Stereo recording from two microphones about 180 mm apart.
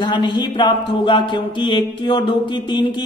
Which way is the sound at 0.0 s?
25° left (ahead or behind).